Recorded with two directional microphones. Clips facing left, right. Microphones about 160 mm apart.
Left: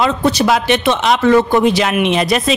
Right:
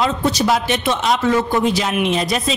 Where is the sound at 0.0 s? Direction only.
70° left (ahead or behind).